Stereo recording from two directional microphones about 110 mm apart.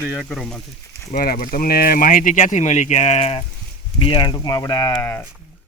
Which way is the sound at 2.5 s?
90° left.